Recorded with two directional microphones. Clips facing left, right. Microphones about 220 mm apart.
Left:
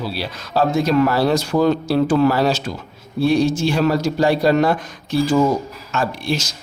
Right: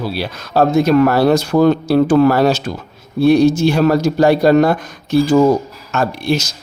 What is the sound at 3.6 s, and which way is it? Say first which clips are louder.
Speech: right 5 dB; 45° right (ahead or behind).